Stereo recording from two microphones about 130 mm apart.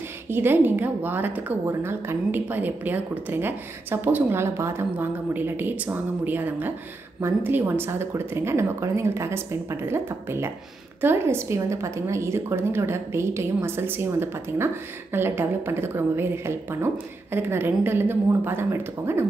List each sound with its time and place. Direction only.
0.3 s a woman's voice: 15° right (ahead or behind)